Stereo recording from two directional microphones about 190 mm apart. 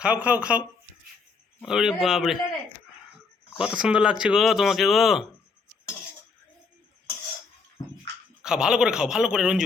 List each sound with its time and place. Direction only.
0.0 s speech: 5° right (ahead or behind)
1.6 s speech: centre (ahead or behind)
3.5 s speech: 5° right (ahead or behind)
8.4 s speech: 5° right (ahead or behind)